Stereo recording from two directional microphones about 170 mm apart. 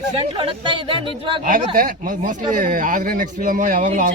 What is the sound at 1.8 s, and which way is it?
Speech, 55° right (ahead or behind).